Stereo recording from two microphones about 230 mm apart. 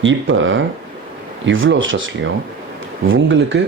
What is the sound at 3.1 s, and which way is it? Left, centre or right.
Speech, right.